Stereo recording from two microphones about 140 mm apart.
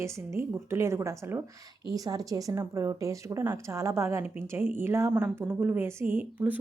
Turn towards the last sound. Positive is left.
turn(degrees=-15)  # may be behind; listen again after turning